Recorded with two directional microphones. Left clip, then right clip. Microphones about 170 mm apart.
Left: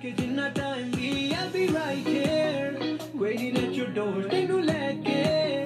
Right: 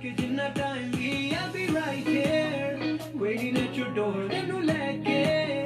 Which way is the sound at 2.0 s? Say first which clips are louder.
Even; 40° left (ahead or behind).